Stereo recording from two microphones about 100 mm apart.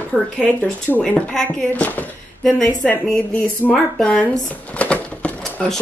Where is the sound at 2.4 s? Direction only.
5° left (ahead or behind).